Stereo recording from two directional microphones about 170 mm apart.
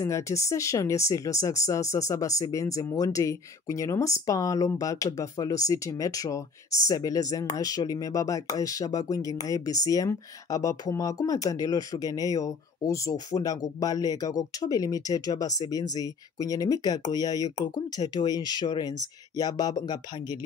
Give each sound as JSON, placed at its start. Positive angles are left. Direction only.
{"t": 0.0, "sound": "speech", "side_deg": 15}